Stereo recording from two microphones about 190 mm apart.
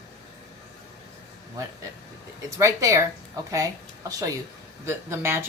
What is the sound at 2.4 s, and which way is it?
A woman's voice, 15° right (ahead or behind).